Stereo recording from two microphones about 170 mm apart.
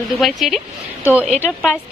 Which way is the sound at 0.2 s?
Centre (ahead or behind).